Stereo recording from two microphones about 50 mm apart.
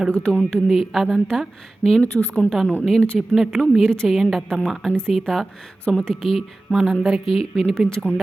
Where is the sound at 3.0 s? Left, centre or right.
Left.